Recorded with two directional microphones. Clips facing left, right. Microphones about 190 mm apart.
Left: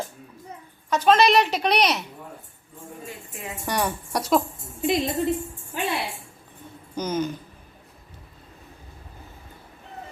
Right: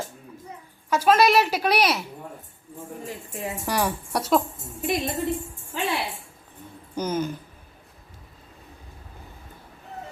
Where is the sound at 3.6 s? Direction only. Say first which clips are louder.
Even; 5° right (ahead or behind).